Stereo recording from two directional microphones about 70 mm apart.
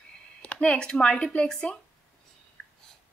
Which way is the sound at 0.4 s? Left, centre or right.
Centre.